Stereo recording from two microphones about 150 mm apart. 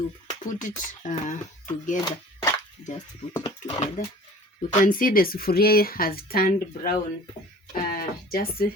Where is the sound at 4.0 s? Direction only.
60° left (ahead or behind); by 6.9 s 85° left.